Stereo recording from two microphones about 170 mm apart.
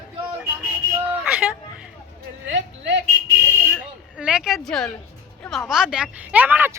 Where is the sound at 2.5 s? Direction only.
90° right.